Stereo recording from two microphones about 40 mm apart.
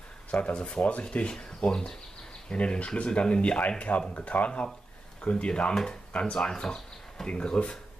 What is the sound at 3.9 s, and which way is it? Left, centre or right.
Speech, left.